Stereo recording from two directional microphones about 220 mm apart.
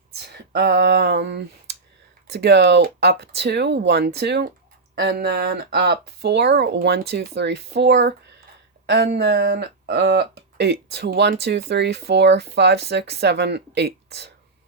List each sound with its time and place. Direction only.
0.2 s finger snapping: 45° right (ahead or behind)
2.3 s speech: 50° right (ahead or behind)